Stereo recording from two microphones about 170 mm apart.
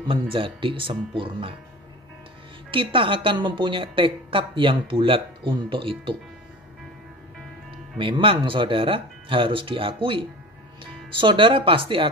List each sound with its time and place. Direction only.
0.1 s a woman's voice: 30° right (ahead or behind)
2.7 s a woman's voice: 30° right (ahead or behind)
8.0 s a woman's voice: 30° right (ahead or behind)